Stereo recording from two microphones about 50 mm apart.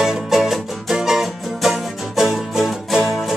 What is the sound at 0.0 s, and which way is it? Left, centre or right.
Music, centre.